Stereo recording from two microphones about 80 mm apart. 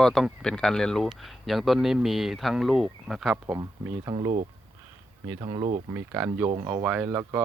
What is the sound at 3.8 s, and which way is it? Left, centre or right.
Speech, right.